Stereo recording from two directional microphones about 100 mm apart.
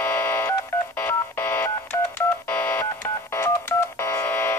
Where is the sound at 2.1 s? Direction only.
20° left (ahead or behind).